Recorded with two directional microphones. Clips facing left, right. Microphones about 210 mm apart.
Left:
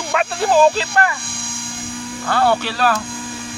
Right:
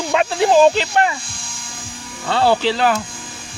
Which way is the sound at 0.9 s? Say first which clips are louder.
Right 1 dB; 60° left (ahead or behind).